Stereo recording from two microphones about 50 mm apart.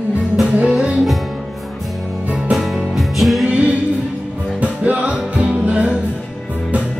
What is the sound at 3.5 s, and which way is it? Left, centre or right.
Music, right.